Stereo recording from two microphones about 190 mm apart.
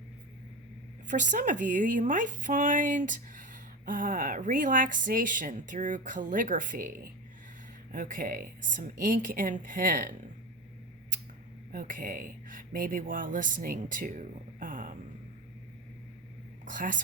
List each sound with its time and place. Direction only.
1.0 s a woman's voice: 40° right (ahead or behind)
11.7 s speech: 45° right (ahead or behind)
16.6 s whispering: 45° right (ahead or behind)